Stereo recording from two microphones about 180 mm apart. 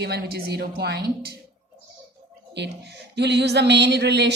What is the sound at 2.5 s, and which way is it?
A woman's voice, 70° right (ahead or behind).